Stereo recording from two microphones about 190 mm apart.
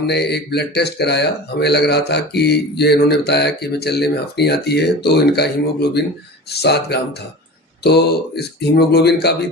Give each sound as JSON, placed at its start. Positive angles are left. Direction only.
{"t": 0.1, "sound": "speech", "side_deg": 60}